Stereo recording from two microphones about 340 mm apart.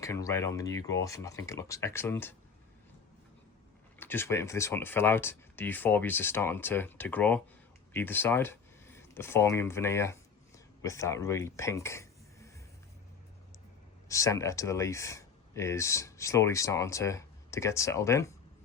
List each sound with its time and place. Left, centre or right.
0.0 s speech: centre
4.0 s speech: centre
14.1 s speech: centre